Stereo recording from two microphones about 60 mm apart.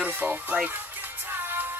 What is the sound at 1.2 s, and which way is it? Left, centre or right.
Music, right.